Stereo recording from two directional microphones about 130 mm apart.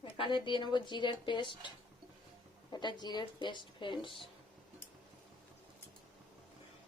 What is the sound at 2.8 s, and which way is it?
Speech, 35° left (ahead or behind).